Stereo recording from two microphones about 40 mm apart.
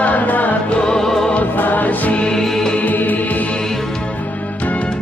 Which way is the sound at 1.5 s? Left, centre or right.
Left.